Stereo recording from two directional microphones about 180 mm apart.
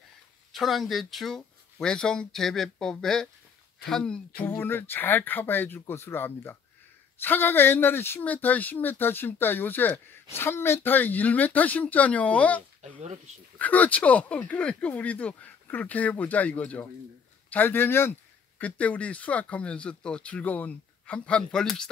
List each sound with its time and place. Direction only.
0.6 s speech: centre (ahead or behind)
12.8 s speech: 40° right (ahead or behind)
13.6 s speech: 10° left (ahead or behind)